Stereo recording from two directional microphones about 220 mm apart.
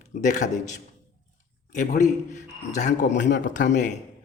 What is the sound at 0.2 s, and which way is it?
Speech, 35° left (ahead or behind).